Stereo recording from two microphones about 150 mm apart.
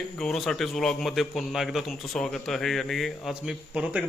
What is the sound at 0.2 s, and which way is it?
Speech, centre (ahead or behind).